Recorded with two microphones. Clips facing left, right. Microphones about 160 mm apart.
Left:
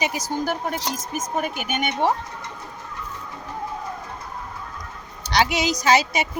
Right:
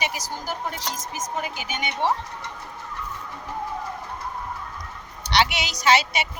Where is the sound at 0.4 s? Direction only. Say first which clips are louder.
Left 5 dB; 55° left (ahead or behind).